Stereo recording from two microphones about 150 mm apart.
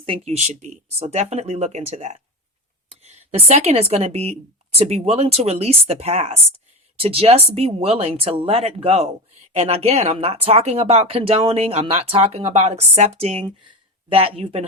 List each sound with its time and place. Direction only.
0.0 s speech: 40° right (ahead or behind)